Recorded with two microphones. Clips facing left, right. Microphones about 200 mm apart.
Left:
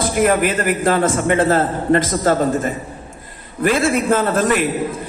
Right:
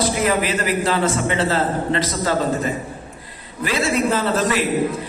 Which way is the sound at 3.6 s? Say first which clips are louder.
Left 4 dB; 50° left (ahead or behind).